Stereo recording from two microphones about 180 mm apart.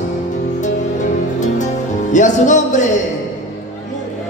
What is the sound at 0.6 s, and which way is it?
Music, 45° left (ahead or behind).